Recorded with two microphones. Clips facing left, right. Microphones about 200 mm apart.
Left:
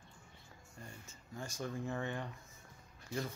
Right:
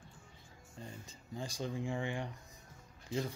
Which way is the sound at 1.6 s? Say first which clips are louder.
Right 1 dB; 15° right (ahead or behind).